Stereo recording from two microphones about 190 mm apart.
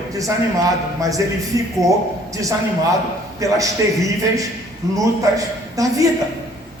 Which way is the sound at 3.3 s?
15° right (ahead or behind).